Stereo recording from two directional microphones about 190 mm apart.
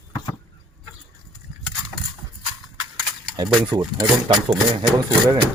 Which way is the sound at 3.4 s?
20° right (ahead or behind).